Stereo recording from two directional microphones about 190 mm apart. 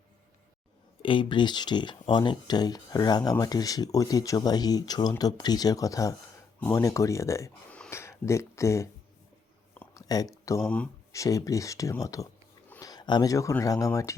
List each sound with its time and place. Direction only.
1.0 s speech: 25° left (ahead or behind)
7.8 s a sound: 15° left (ahead or behind)
10.1 s speech: 20° left (ahead or behind)
10.6 s speech: 5° left (ahead or behind)
11.1 s speech: 15° left (ahead or behind)